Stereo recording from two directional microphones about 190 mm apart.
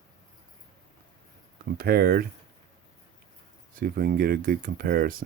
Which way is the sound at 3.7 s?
50° right (ahead or behind).